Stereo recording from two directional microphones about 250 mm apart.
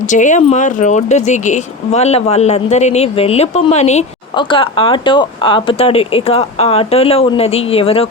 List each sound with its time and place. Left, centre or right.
0.1 s speech: left